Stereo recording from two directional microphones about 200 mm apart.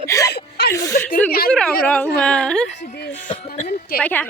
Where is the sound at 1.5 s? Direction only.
5° left (ahead or behind).